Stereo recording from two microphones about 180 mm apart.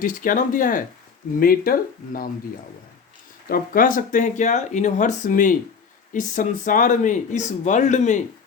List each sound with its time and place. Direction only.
0.0 s speech: 50° left (ahead or behind)
3.5 s speech: 50° left (ahead or behind)